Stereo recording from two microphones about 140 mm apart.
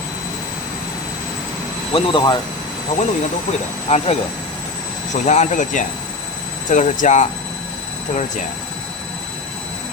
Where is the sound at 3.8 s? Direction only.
45° left (ahead or behind).